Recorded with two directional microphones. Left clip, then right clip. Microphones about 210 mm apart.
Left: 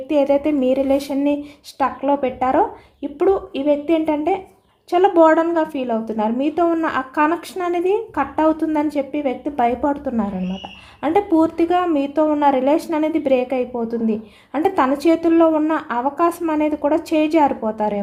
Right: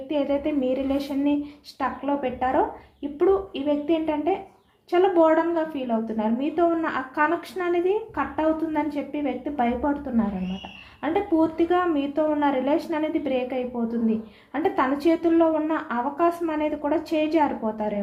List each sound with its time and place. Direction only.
0.1 s a woman's voice: 50° left (ahead or behind)